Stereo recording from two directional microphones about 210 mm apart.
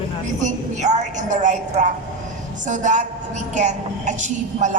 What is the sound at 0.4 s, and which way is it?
A woman's voice, 35° right (ahead or behind).